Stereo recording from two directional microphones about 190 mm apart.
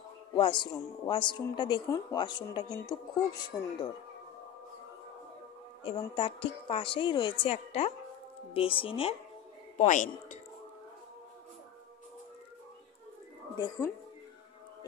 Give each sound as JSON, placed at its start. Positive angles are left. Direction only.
{"t": 0.4, "sound": "a woman's voice", "side_deg": 25}
{"t": 5.9, "sound": "a woman's voice", "side_deg": 25}
{"t": 9.8, "sound": "a man's voice", "side_deg": 40}
{"t": 13.6, "sound": "a woman's voice", "side_deg": 20}